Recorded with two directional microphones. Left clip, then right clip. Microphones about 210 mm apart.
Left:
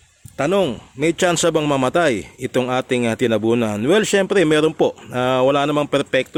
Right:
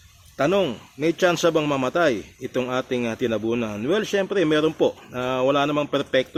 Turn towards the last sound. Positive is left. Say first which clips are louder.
# left 4 dB
turn(degrees=40)  # may be behind; listen again after turning